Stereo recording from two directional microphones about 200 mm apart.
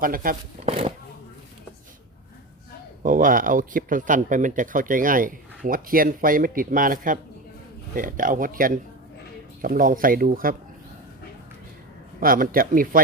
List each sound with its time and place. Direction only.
0.0 s speech: 45° right (ahead or behind)
0.6 s speech: 30° right (ahead or behind)
3.0 s speech: 40° right (ahead or behind)
12.2 s speech: 45° right (ahead or behind)